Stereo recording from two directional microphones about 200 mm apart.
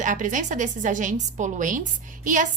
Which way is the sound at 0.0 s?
40° right (ahead or behind).